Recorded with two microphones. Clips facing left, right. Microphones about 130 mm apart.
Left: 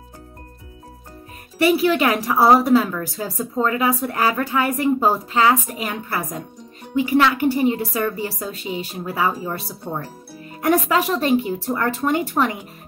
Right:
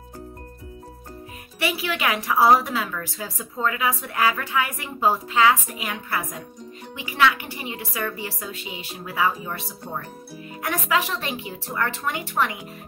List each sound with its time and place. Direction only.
1.6 s a woman's voice: 40° left (ahead or behind)